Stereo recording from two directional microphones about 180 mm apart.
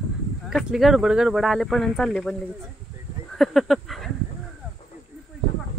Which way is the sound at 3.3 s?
Centre (ahead or behind).